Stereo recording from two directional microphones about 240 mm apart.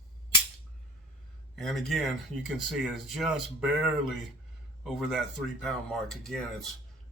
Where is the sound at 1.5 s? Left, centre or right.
Centre.